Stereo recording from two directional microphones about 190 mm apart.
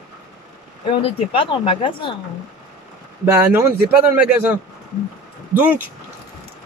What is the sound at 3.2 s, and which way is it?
A man's voice, 10° right (ahead or behind).